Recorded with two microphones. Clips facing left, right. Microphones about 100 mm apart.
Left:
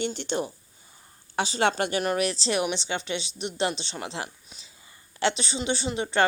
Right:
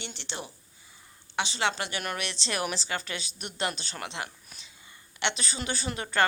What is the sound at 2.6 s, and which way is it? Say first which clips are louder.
A woman's voice: left 4 dB; 20° left (ahead or behind).